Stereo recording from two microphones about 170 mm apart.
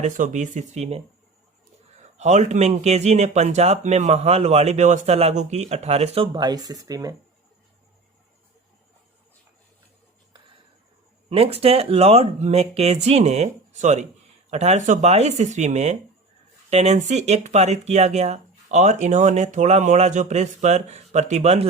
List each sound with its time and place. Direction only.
0.0 s speech: 45° right (ahead or behind)
6.3 s speech: 25° right (ahead or behind)
11.3 s speech: 35° right (ahead or behind)